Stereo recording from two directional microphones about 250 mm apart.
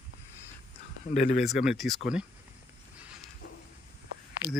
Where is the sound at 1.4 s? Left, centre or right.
Centre.